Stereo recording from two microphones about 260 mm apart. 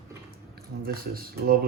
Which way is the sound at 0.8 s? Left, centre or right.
Right.